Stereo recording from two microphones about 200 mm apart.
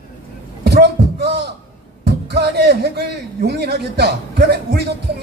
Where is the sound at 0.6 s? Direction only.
55° right (ahead or behind).